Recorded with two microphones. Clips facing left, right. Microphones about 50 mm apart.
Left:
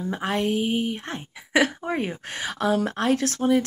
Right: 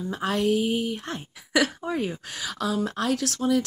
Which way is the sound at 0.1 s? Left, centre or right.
Left.